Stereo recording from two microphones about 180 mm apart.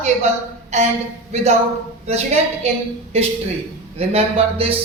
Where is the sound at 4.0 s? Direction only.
35° right (ahead or behind).